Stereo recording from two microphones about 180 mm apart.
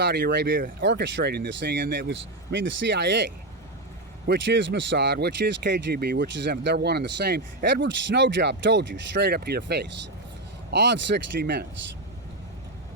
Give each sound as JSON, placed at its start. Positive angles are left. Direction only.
{"t": 0.0, "sound": "speech", "side_deg": -70}
{"t": 2.0, "sound": "speech", "side_deg": -80}
{"t": 10.7, "sound": "speech", "side_deg": -80}